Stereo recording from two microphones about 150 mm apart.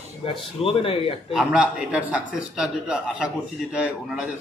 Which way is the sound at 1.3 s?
5° right (ahead or behind).